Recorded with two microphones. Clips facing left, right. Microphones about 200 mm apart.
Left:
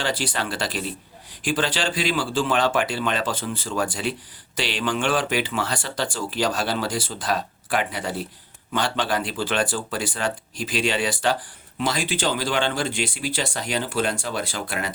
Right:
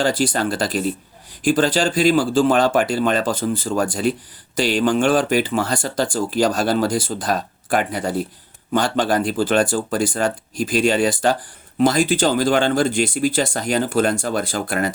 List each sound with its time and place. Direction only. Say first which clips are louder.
0.0 s speech: right 7 dB; 40° right (ahead or behind)